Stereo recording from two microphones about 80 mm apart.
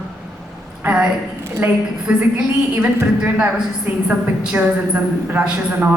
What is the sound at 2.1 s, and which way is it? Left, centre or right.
A woman's voice, centre.